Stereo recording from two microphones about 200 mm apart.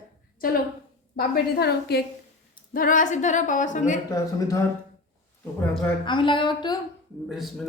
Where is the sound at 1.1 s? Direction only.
55° left (ahead or behind).